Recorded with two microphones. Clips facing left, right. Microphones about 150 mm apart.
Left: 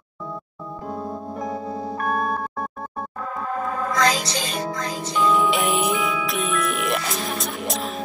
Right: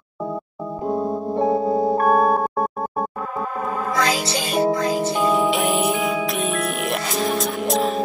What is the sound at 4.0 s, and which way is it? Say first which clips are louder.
Music: left 1 dB; 10° right (ahead or behind).